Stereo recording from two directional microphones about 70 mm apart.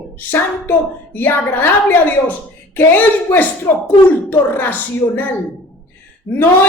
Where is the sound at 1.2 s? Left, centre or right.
Left.